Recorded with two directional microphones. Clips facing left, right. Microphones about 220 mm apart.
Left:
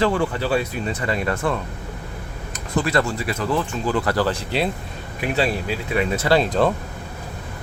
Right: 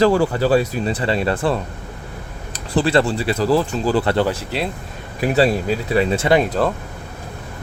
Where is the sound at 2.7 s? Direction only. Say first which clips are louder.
Right 4 dB; 30° right (ahead or behind).